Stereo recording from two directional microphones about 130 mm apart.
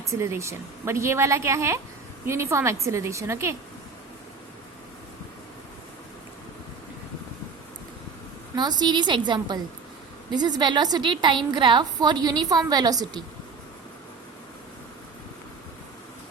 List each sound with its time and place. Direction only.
0.1 s speech: 20° right (ahead or behind)
8.5 s a woman's voice: 35° right (ahead or behind)